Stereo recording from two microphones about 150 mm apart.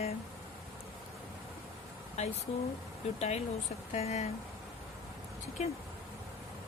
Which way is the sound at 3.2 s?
45° left (ahead or behind).